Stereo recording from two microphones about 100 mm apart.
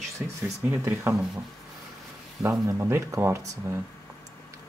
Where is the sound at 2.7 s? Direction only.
25° right (ahead or behind).